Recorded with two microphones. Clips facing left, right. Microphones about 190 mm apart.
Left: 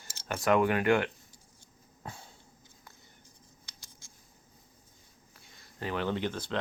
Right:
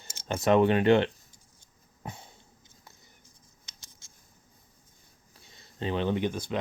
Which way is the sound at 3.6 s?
20° right (ahead or behind).